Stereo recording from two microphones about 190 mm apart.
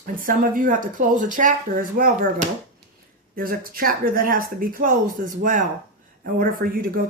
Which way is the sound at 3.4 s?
50° right (ahead or behind).